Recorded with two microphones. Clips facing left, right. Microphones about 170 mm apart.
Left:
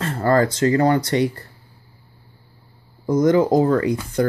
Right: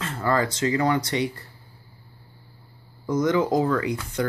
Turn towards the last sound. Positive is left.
turn(degrees=40)  # may be behind; listen again after turning